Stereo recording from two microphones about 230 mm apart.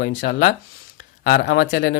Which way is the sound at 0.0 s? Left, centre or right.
Left.